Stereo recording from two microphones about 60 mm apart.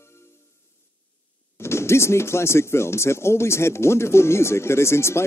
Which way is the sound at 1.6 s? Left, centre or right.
Left.